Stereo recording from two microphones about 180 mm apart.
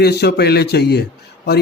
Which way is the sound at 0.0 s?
65° left (ahead or behind).